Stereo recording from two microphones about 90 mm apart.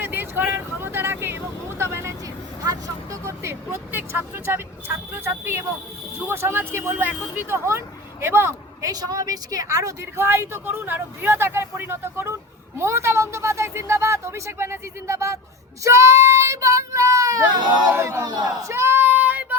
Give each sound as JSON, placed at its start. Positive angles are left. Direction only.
{"t": 0.0, "sound": "vehicle", "side_deg": -25}
{"t": 2.6, "sound": "speech", "side_deg": -40}
{"t": 8.9, "sound": "a woman's voice", "side_deg": -45}
{"t": 10.2, "sound": "speech", "side_deg": -30}
{"t": 18.3, "sound": "a woman's voice", "side_deg": -45}
{"t": 18.7, "sound": "child singing", "side_deg": -30}